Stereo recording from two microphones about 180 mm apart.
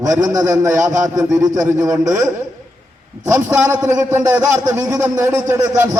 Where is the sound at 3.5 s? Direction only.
20° right (ahead or behind).